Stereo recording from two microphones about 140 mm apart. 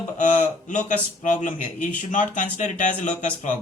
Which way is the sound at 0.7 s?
60° left (ahead or behind).